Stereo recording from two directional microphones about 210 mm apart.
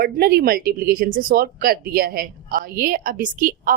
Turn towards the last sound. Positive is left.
turn(degrees=-40)  # may be behind; listen again after turning